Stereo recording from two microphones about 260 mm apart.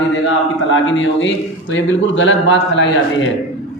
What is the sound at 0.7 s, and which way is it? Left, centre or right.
A man's voice, left.